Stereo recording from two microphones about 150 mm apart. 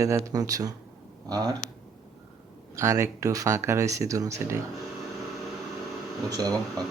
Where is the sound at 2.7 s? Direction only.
20° right (ahead or behind).